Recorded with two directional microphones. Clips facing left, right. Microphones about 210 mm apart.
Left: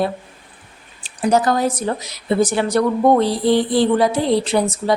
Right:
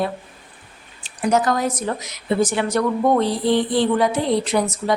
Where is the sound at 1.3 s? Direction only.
35° left (ahead or behind).